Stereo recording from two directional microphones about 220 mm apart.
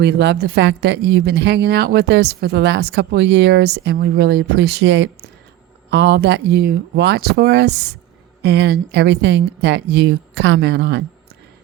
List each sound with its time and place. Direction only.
0.0 s speech: 50° right (ahead or behind)